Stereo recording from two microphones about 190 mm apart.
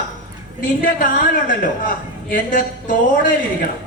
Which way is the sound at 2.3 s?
45° left (ahead or behind).